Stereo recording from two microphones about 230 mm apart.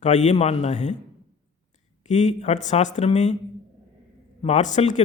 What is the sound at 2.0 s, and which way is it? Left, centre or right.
A man's voice, left.